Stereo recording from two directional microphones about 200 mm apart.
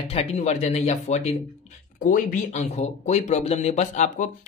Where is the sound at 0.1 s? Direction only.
30° left (ahead or behind).